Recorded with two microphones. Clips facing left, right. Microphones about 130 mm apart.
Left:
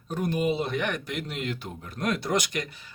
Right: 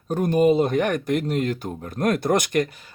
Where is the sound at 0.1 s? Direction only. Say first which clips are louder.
Right 8 dB; 45° right (ahead or behind).